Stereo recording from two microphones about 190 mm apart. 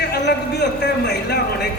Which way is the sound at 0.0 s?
60° left (ahead or behind).